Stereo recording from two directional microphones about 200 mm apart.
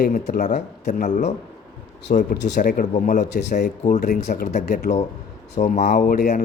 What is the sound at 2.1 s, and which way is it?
Speech, 55° left (ahead or behind).